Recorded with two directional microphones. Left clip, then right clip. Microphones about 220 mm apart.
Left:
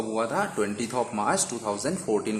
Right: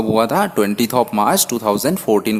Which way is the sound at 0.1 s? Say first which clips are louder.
Right 12 dB; 40° right (ahead or behind).